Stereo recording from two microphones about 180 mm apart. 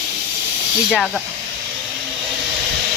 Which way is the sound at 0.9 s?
Centre (ahead or behind).